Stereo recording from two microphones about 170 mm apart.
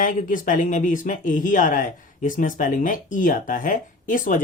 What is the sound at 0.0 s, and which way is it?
Speech, 50° left (ahead or behind).